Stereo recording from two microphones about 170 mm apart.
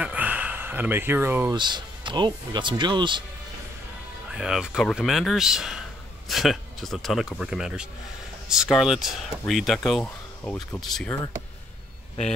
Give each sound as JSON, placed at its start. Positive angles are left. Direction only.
{"t": 0.0, "sound": "a sound", "side_deg": -10}
{"t": 1.5, "sound": "speech", "side_deg": -25}
{"t": 4.3, "sound": "speech", "side_deg": -5}